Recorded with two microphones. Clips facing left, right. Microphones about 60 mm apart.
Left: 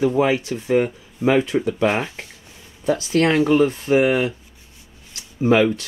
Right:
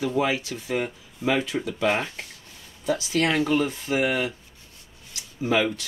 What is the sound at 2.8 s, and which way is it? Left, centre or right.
Speech, left.